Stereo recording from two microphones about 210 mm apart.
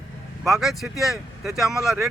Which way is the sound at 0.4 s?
Centre (ahead or behind).